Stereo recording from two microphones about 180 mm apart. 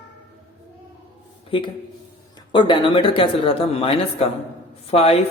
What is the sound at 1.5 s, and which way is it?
A man's voice, 30° left (ahead or behind).